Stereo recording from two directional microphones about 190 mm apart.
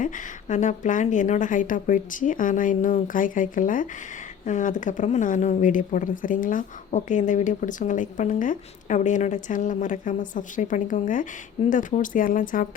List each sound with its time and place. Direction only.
0.0 s speech: 45° left (ahead or behind)